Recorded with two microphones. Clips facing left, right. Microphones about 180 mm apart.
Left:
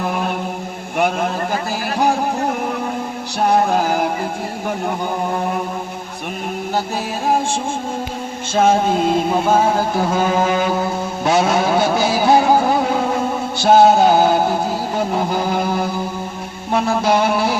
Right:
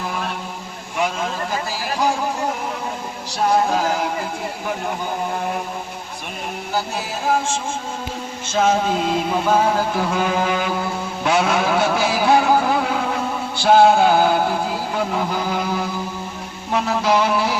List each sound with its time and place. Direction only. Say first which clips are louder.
0.0 s chant: left 5 dB; 55° left (ahead or behind)
0.9 s a sound: left 4 dB; 55° left (ahead or behind)
3.4 s music: left 2 dB; 55° left (ahead or behind)
8.5 s mantra: left 3 dB; 50° left (ahead or behind)
9.6 s a sound: left 2 dB; 25° left (ahead or behind)
10.1 s vehicle: left 3 dB; 40° left (ahead or behind)
12.7 s music: left 3 dB; 40° left (ahead or behind)
13.6 s mantra: left 2 dB; 40° left (ahead or behind)